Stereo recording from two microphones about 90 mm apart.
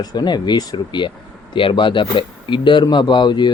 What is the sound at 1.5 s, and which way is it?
Speech, 65° left (ahead or behind).